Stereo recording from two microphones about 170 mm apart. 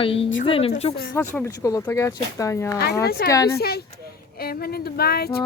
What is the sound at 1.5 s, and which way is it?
Speech, 20° left (ahead or behind).